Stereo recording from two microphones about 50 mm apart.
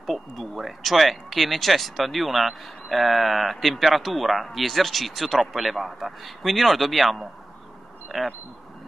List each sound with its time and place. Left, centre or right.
0.0 s speech: centre